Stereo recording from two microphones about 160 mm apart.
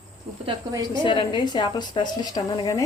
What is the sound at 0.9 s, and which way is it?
A woman's voice, 30° left (ahead or behind).